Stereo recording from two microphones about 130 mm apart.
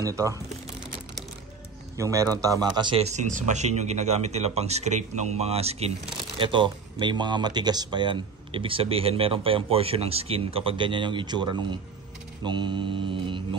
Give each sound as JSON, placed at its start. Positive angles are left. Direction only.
{"t": 0.0, "sound": "speech", "side_deg": -25}
{"t": 2.0, "sound": "a man's voice", "side_deg": -25}
{"t": 3.0, "sound": "speech", "side_deg": -60}
{"t": 6.4, "sound": "speech", "side_deg": -40}